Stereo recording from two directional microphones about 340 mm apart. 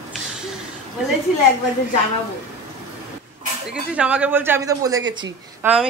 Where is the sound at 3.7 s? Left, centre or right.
Centre.